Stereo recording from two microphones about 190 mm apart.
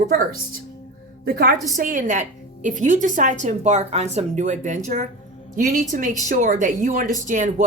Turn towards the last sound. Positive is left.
turn(degrees=-40)  # may be behind; listen again after turning